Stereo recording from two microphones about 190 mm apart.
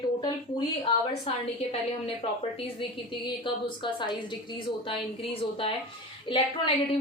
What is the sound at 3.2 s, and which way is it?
A woman's voice, 25° left (ahead or behind).